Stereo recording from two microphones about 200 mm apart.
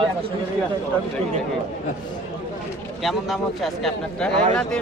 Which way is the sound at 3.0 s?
Centre (ahead or behind).